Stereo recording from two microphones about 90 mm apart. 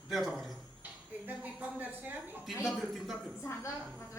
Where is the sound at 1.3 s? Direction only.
20° right (ahead or behind).